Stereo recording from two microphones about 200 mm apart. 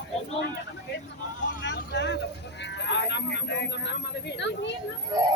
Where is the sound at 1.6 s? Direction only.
60° left (ahead or behind).